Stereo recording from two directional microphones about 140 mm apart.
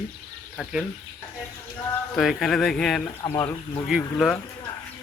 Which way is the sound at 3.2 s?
20° left (ahead or behind).